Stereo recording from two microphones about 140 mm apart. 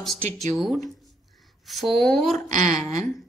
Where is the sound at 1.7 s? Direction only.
Centre (ahead or behind).